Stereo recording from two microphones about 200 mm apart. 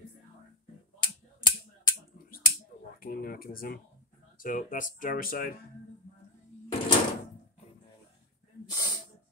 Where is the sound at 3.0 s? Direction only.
45° left (ahead or behind).